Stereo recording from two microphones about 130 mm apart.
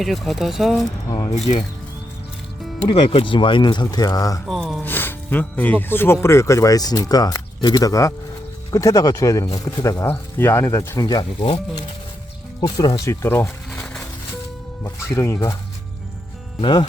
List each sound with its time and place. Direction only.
0.0 s speech: centre (ahead or behind)
1.3 s speech: 55° left (ahead or behind)
2.8 s speech: 50° left (ahead or behind); by 4.4 s 30° left (ahead or behind)
4.4 s speech: centre (ahead or behind)
4.8 s speech: 15° left (ahead or behind); by 11.4 s 30° left (ahead or behind)
12.5 s speech: 30° left (ahead or behind)
13.2 s speech: 20° left (ahead or behind)
14.8 s speech: 25° left (ahead or behind)
16.6 s speech: 40° left (ahead or behind)